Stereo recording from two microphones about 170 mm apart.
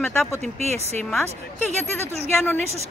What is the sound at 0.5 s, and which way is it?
Speech, 40° right (ahead or behind).